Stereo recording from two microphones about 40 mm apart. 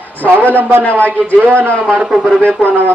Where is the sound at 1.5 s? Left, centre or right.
Left.